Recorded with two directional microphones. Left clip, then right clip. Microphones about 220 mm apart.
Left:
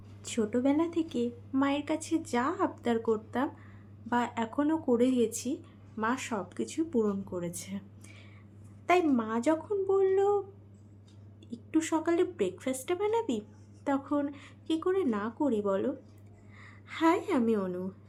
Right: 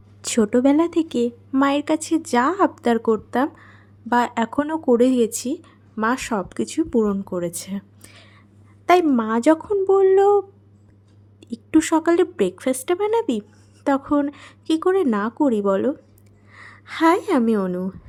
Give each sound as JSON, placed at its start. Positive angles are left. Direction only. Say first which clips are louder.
{"t": 0.2, "sound": "a woman's voice", "louder": "right 12 dB", "side_deg": -50}